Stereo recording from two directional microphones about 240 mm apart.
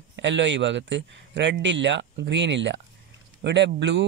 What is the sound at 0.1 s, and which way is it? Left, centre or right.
Speech, right.